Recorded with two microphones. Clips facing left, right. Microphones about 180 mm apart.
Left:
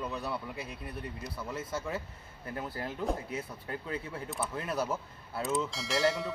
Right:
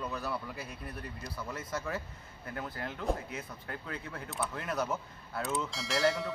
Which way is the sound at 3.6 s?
15° left (ahead or behind).